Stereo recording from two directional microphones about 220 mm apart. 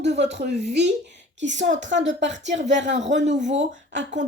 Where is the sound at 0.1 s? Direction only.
30° right (ahead or behind).